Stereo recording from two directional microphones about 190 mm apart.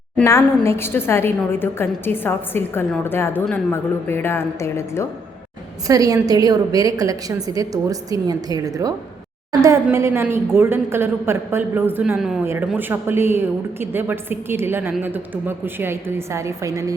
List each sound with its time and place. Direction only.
0.3 s a woman's voice: 15° left (ahead or behind)
5.9 s a woman's voice: 20° right (ahead or behind)